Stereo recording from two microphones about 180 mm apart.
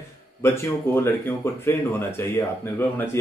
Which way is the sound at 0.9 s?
15° left (ahead or behind).